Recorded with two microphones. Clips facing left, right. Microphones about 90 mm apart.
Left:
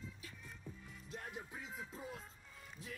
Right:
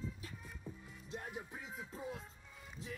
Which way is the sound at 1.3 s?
Centre (ahead or behind).